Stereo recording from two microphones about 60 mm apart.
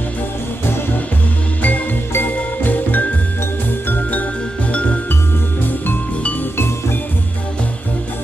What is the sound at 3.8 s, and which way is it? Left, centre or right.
Jingle, left.